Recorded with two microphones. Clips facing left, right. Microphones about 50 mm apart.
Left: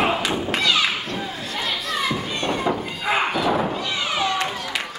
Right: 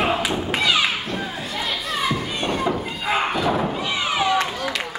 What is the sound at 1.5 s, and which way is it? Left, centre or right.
Children playing, centre.